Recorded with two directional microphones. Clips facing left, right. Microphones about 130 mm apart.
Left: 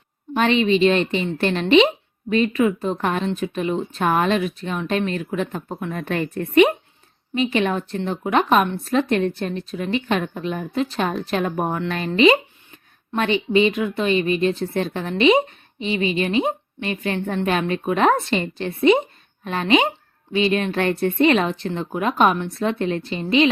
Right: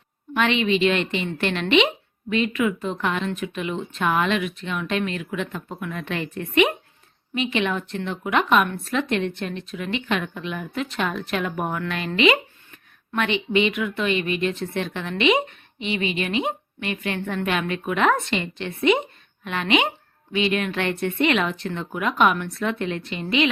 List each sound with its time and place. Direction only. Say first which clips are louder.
0.3 s a woman's voice: left 3 dB; 35° left (ahead or behind)
3.2 s a woman's voice: left 4 dB; 30° left (ahead or behind)